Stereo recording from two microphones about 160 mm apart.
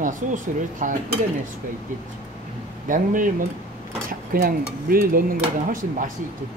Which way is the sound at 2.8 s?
55° right (ahead or behind).